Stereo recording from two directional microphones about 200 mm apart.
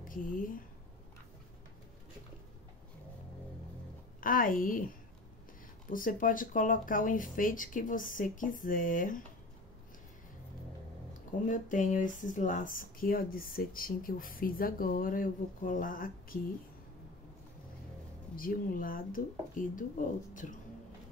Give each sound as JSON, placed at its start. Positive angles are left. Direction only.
{"t": 0.1, "sound": "speech", "side_deg": 45}
{"t": 4.2, "sound": "speech", "side_deg": 45}
{"t": 5.9, "sound": "speech", "side_deg": 40}
{"t": 11.4, "sound": "speech", "side_deg": 40}
{"t": 18.3, "sound": "speech", "side_deg": 45}